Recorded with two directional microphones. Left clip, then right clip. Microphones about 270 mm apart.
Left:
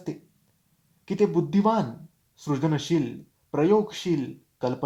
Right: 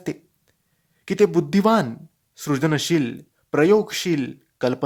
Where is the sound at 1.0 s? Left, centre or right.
Right.